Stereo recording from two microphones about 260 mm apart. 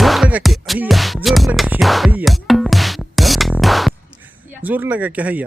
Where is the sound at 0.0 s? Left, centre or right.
Centre.